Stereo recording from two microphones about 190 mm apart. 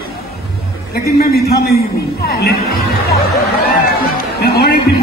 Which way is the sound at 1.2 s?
55° left (ahead or behind).